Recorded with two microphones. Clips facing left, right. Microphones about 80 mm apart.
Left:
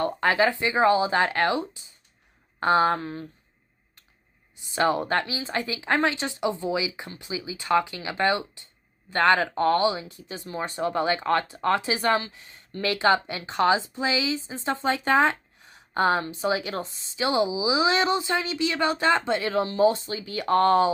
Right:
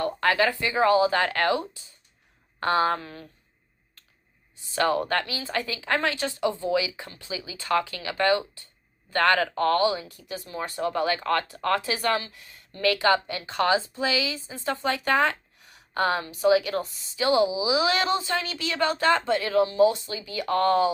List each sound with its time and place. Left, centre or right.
0.0 s speech: left
4.6 s speech: left